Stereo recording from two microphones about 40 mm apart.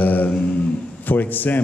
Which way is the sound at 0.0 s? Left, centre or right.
Left.